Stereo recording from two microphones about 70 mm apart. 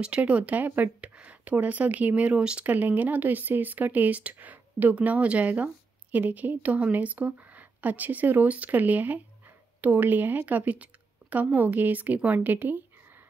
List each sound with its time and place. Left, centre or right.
0.0 s speech: centre